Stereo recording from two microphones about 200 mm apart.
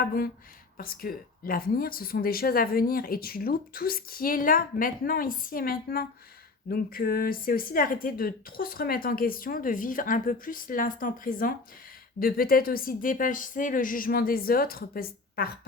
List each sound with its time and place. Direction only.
0.0 s speech: 45° left (ahead or behind)